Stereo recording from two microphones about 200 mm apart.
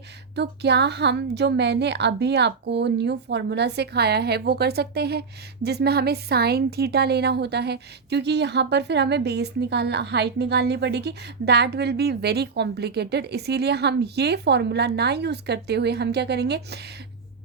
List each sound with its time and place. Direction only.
0.3 s a woman's voice: 55° right (ahead or behind)